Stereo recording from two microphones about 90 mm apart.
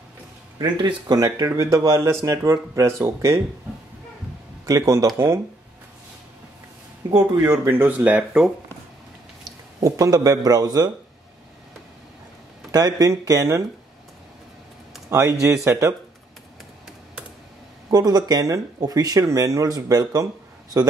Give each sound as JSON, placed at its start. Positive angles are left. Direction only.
{"t": 0.6, "sound": "speech", "side_deg": -55}
{"t": 4.6, "sound": "speech", "side_deg": -40}
{"t": 5.1, "sound": "speech", "side_deg": -25}
{"t": 7.0, "sound": "speech", "side_deg": -50}
{"t": 7.6, "sound": "speech", "side_deg": -25}
{"t": 9.8, "sound": "speech", "side_deg": -40}
{"t": 12.7, "sound": "speech", "side_deg": -45}
{"t": 15.0, "sound": "speech", "side_deg": -35}
{"t": 17.8, "sound": "speech", "side_deg": -45}